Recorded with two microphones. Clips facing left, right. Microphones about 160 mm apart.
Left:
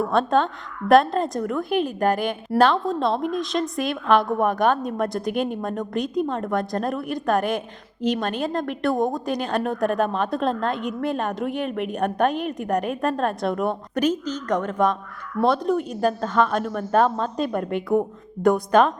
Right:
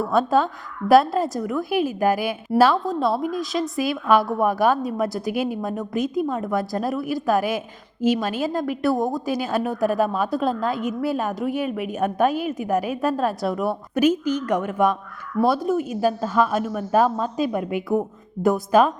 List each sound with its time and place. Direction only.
0.0 s a woman's voice: 5° right (ahead or behind)